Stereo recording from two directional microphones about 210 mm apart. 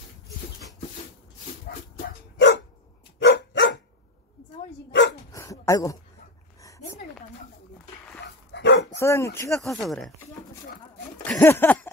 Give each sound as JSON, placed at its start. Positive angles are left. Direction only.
{"t": 2.3, "sound": "dog", "side_deg": 55}
{"t": 5.3, "sound": "dog", "side_deg": 15}
{"t": 8.5, "sound": "dog", "side_deg": 55}
{"t": 8.9, "sound": "speech", "side_deg": 15}
{"t": 9.5, "sound": "speech", "side_deg": 0}
{"t": 11.2, "sound": "a sound", "side_deg": 10}